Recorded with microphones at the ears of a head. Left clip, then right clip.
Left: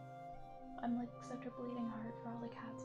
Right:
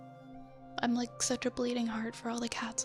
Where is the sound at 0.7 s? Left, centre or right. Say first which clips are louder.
Right 10 dB; right.